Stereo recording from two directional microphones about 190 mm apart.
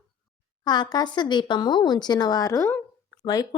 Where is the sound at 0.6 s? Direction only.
20° left (ahead or behind).